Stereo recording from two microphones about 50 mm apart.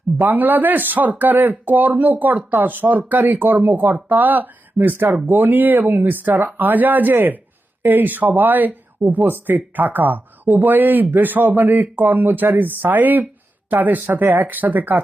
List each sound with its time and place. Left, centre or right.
0.2 s speech: right